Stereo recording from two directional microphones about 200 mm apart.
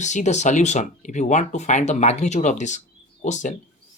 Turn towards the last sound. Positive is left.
turn(degrees=40)  # may be behind; listen again after turning